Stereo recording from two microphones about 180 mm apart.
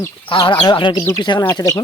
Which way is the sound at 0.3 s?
25° left (ahead or behind).